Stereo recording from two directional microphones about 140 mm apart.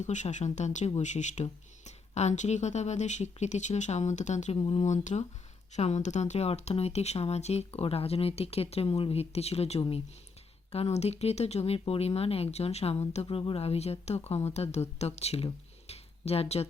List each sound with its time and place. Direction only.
0.0 s speech: 60° left (ahead or behind)
4.5 s speech: 40° left (ahead or behind)
15.9 s a sound: 45° left (ahead or behind)